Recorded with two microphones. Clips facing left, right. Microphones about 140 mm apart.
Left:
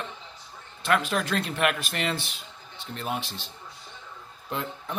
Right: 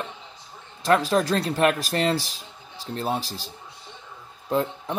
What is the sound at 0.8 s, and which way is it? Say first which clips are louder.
Speech: right 5 dB; 35° right (ahead or behind).